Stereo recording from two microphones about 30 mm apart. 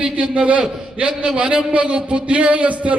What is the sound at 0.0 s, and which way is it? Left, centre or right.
A man's voice, right.